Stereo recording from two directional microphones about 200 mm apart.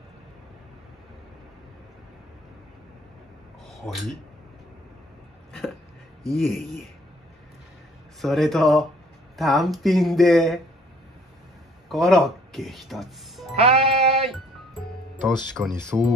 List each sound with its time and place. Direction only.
3.6 s a sound: centre (ahead or behind)
6.4 s speech: centre (ahead or behind)
8.2 s speech: centre (ahead or behind)
11.9 s speech: centre (ahead or behind)
13.6 s music: 30° right (ahead or behind)
15.2 s speech: 5° left (ahead or behind)